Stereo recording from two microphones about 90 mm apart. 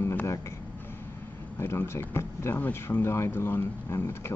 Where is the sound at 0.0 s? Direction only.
25° left (ahead or behind).